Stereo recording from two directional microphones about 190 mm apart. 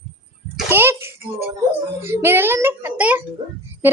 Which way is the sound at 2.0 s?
10° right (ahead or behind).